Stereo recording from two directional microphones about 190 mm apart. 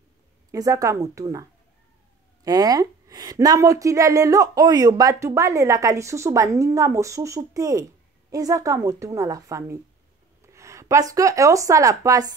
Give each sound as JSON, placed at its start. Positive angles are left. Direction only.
{"t": 0.5, "sound": "a woman's voice", "side_deg": -20}
{"t": 2.4, "sound": "a woman's voice", "side_deg": -20}